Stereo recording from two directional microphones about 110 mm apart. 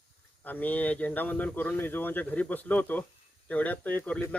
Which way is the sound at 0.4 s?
15° left (ahead or behind).